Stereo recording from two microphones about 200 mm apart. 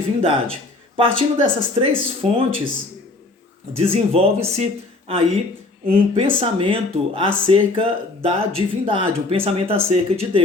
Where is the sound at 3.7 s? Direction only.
30° right (ahead or behind).